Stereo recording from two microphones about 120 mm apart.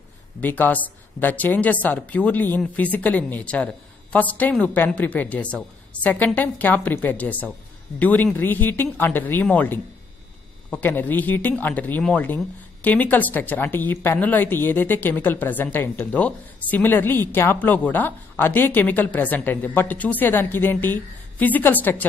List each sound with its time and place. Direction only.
0.4 s a woman's voice: 15° left (ahead or behind)